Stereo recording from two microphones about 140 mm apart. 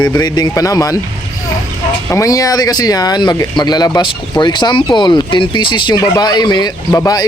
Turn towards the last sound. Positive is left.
turn(degrees=25)  # may be behind; listen again after turning